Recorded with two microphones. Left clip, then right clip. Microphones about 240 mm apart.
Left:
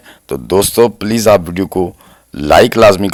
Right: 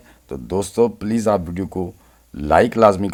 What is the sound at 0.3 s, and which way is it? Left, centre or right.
Speech, left.